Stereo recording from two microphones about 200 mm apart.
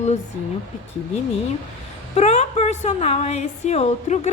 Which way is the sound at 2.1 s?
35° left (ahead or behind).